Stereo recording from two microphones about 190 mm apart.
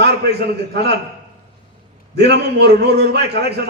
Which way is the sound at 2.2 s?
60° right (ahead or behind).